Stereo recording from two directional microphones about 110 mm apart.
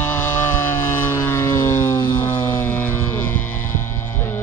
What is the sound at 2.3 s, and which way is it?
Music, 20° left (ahead or behind).